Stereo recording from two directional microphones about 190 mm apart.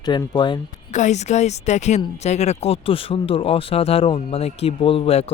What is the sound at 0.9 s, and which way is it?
Speech, 40° left (ahead or behind).